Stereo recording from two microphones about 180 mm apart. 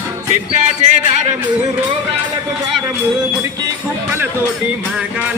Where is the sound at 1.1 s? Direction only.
40° right (ahead or behind).